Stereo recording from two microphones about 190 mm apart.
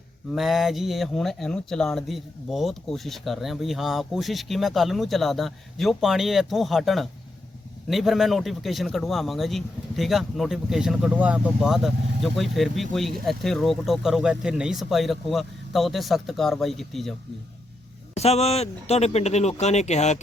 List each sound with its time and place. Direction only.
0.3 s a man's voice: centre (ahead or behind)
18.1 s speech: 35° left (ahead or behind)